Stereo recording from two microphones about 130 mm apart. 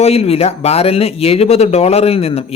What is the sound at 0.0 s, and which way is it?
Speech, 50° left (ahead or behind).